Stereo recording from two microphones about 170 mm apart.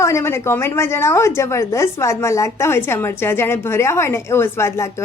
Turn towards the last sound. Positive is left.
turn(degrees=15)  # may be behind; listen again after turning